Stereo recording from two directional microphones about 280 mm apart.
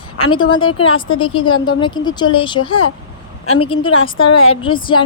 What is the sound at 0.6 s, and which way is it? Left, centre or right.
A woman's voice, centre.